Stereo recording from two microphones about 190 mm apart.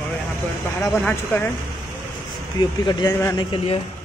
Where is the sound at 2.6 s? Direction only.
20° left (ahead or behind).